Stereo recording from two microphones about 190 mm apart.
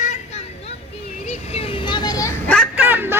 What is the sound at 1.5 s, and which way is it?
Vehicle, 30° left (ahead or behind).